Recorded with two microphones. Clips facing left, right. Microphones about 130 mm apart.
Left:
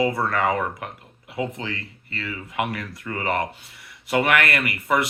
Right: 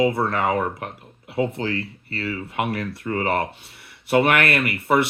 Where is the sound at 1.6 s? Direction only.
35° right (ahead or behind).